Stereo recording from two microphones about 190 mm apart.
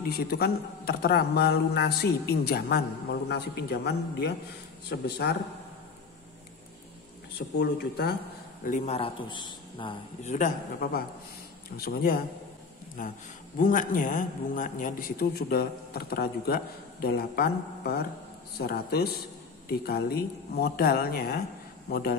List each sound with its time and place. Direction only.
0.1 s a man's voice: 55° left (ahead or behind)
7.5 s a man's voice: 60° left (ahead or behind)
8.6 s a man's voice: 40° left (ahead or behind)
10.2 s a man's voice: 40° left (ahead or behind)